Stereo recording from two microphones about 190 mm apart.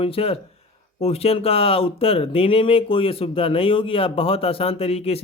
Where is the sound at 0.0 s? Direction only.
30° left (ahead or behind).